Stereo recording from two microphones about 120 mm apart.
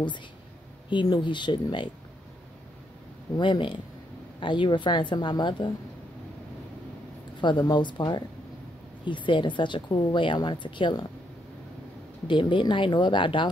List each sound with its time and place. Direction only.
0.8 s a woman's voice: 40° left (ahead or behind)
3.3 s a woman's voice: 40° left (ahead or behind)
7.3 s a woman's voice: 40° left (ahead or behind)
12.3 s a woman's voice: 40° left (ahead or behind)